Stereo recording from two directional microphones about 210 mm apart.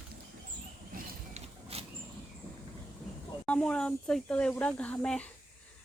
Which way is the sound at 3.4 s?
5° left (ahead or behind).